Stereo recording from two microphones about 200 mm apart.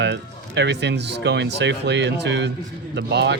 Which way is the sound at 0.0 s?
60° right (ahead or behind).